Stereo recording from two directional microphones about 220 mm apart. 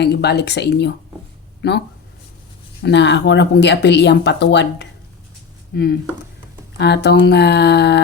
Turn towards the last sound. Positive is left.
turn(degrees=50)  # may be behind; listen again after turning